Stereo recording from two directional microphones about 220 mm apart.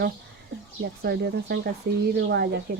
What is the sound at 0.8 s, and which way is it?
Speech, 50° right (ahead or behind).